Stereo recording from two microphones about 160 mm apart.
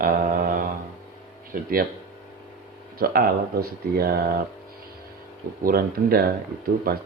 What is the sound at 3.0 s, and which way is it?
Speech, 70° right (ahead or behind).